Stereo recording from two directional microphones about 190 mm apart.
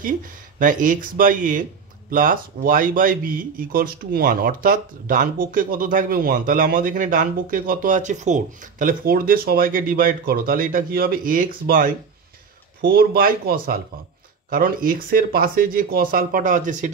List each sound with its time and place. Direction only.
0.6 s speech: 45° right (ahead or behind)